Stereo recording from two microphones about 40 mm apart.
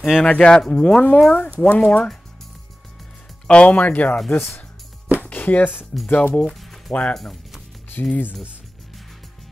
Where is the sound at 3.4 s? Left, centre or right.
Left.